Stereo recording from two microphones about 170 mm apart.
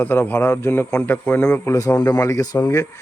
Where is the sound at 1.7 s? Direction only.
20° left (ahead or behind).